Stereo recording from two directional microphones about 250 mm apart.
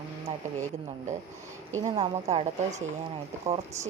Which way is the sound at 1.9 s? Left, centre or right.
Right.